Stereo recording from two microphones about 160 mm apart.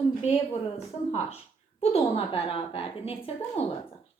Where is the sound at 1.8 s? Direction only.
35° left (ahead or behind).